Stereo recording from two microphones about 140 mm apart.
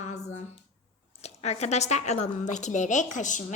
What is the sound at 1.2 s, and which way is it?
A woman's voice, 50° left (ahead or behind).